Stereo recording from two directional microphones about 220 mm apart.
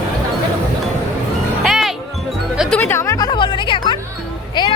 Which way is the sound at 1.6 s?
Centre (ahead or behind).